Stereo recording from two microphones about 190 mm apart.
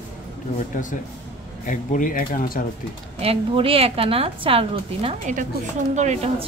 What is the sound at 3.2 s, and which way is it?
A woman's voice, 30° right (ahead or behind).